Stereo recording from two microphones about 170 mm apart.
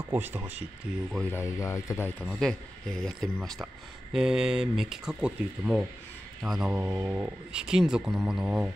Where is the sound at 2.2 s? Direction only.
Centre (ahead or behind).